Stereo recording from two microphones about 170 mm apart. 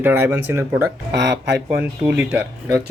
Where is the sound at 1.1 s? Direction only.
85° right.